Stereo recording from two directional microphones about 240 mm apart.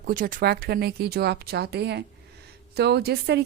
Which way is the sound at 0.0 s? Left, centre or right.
Right.